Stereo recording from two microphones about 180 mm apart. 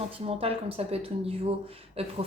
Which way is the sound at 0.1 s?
30° right (ahead or behind).